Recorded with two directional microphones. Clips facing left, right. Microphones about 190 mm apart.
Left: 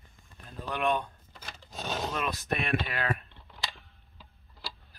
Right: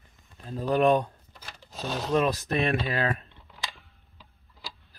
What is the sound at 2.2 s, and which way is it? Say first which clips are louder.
Speech: right 7 dB; 30° right (ahead or behind).